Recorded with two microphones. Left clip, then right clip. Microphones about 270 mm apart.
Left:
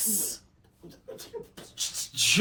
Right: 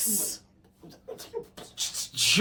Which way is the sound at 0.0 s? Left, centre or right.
Centre.